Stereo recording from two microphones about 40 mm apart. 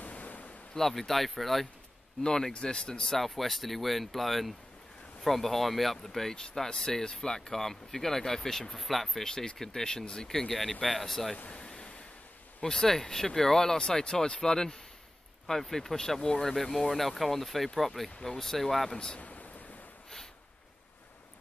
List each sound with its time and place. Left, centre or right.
0.0 s a sound: left
0.7 s speech: centre
2.2 s speech: centre
3.1 s speech: centre
8.7 s speech: centre
9.2 s speech: centre
11.5 s waves: left
12.6 s speech: centre
16.2 s speech: centre
16.5 s speech: centre
19.1 s a sound: left